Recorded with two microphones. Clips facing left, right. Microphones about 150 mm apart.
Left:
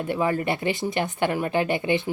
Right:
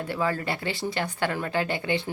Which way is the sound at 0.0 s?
20° left (ahead or behind).